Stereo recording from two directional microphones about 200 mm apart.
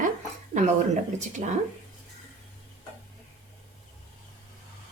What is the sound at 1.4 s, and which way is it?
Speech, 35° right (ahead or behind).